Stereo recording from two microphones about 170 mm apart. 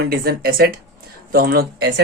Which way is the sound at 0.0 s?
65° right (ahead or behind).